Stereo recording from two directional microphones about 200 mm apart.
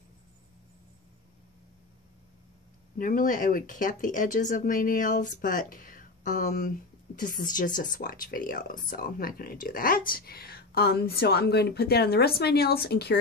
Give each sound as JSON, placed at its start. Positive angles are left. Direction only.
{"t": 3.0, "sound": "speech", "side_deg": 45}